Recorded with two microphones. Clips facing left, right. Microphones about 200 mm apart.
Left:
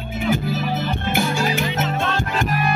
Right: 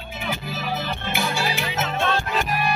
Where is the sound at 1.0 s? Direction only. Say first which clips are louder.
Left 5 dB; 50° left (ahead or behind).